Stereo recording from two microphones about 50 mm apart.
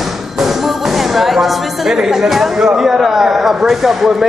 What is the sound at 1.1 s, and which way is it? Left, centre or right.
Speech, centre.